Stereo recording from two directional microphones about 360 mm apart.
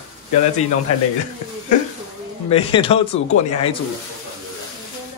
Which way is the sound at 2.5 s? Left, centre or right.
Centre.